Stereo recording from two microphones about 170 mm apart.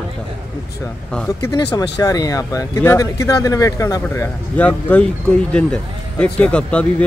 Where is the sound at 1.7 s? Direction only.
20° left (ahead or behind).